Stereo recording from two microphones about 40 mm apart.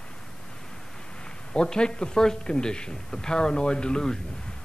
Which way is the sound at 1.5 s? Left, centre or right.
Left.